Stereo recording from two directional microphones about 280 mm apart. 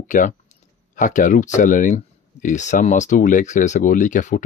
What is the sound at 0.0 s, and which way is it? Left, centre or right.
Speech, left.